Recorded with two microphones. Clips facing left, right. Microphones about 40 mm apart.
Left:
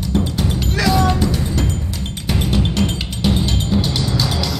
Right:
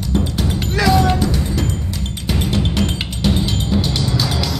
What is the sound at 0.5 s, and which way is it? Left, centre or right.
Music, centre.